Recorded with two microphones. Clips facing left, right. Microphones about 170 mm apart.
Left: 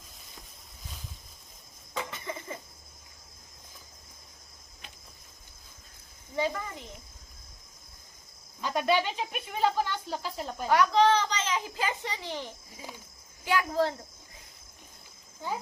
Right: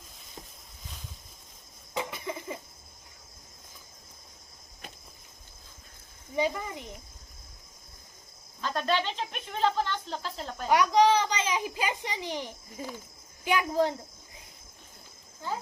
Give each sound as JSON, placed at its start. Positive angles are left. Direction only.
{"t": 1.9, "sound": "a sound", "side_deg": -15}
{"t": 6.3, "sound": "a child's voice", "side_deg": -15}
{"t": 8.6, "sound": "speech", "side_deg": 10}
{"t": 10.7, "sound": "a child's voice", "side_deg": -15}
{"t": 12.8, "sound": "speech", "side_deg": -50}
{"t": 13.4, "sound": "a child's voice", "side_deg": -20}
{"t": 15.4, "sound": "speech", "side_deg": 15}